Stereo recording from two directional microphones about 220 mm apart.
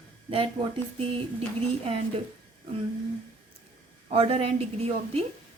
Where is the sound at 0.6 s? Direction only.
20° right (ahead or behind).